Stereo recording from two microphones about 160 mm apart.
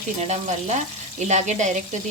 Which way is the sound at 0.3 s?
45° right (ahead or behind).